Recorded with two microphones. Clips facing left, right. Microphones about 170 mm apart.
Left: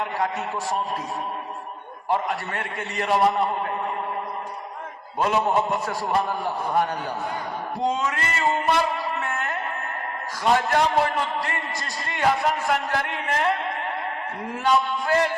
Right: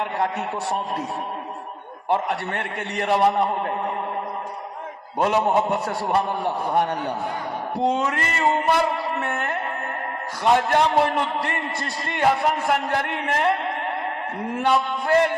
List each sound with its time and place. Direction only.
2.0 s a man's voice: 65° right (ahead or behind)
5.2 s a man's voice: 65° right (ahead or behind)
7.8 s mantra: 60° right (ahead or behind)
10.4 s a man's voice: 60° right (ahead or behind)
14.5 s a man's voice: 60° right (ahead or behind)